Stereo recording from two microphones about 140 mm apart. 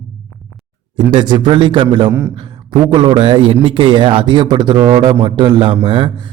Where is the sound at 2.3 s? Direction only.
35° right (ahead or behind).